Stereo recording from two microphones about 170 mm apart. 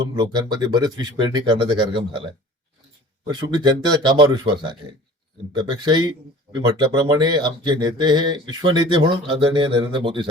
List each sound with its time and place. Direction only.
0.2 s speech: 25° right (ahead or behind)
3.2 s speech: 25° right (ahead or behind)